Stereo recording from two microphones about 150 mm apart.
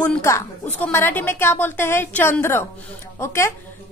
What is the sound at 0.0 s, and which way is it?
Speech, 10° left (ahead or behind).